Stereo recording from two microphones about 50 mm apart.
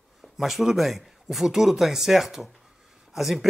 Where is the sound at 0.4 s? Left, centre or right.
Centre.